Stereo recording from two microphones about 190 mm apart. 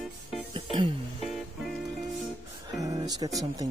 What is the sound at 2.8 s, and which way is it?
Music, 20° right (ahead or behind).